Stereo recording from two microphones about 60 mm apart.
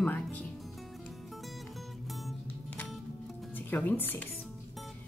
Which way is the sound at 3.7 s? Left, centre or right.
Left.